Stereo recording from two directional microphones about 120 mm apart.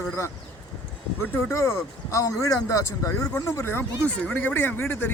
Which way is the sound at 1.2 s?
20° left (ahead or behind).